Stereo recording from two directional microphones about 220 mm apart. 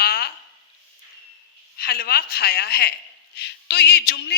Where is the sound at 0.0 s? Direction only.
45° left (ahead or behind).